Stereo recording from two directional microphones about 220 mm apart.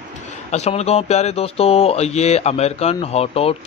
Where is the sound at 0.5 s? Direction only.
30° left (ahead or behind).